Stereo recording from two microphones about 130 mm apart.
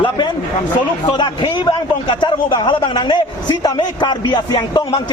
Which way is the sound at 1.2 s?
35° left (ahead or behind).